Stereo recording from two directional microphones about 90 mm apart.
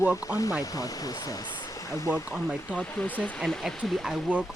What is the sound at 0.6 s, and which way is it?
Speech, 40° left (ahead or behind).